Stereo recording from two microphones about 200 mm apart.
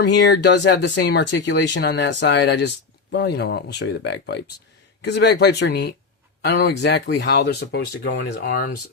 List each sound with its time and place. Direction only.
0.0 s speech: 60° left (ahead or behind)